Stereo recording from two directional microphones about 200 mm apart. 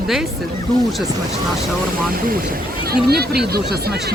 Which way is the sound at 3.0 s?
55° right (ahead or behind).